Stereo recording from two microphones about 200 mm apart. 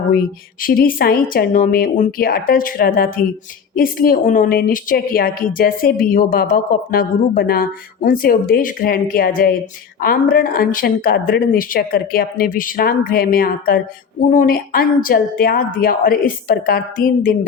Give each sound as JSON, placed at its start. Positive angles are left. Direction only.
{"t": 0.6, "sound": "speech", "side_deg": 45}